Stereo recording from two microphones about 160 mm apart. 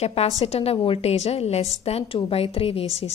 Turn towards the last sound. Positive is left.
turn(degrees=40)  # may be behind; listen again after turning